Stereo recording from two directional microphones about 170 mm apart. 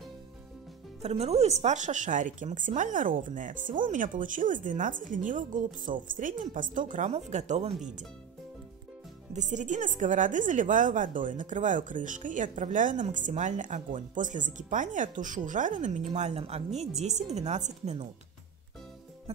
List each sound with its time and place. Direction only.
1.0 s a woman's voice: 40° right (ahead or behind)
9.3 s a woman's voice: 45° right (ahead or behind)